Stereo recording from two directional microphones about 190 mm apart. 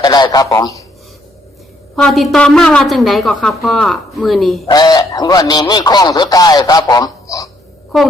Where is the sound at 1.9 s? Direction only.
Centre (ahead or behind).